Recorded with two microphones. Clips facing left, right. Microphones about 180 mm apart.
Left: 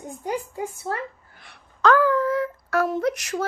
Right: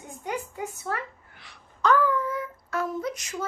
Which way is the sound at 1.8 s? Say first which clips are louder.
Left 4 dB; 90° left.